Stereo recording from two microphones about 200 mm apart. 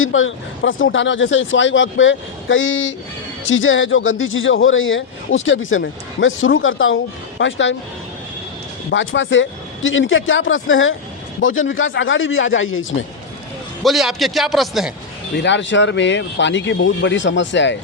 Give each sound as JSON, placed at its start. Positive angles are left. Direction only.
{"t": 0.0, "sound": "speech", "side_deg": 80}
{"t": 8.9, "sound": "speech", "side_deg": 65}
{"t": 13.8, "sound": "a man's voice", "side_deg": 0}
{"t": 15.4, "sound": "speech", "side_deg": 65}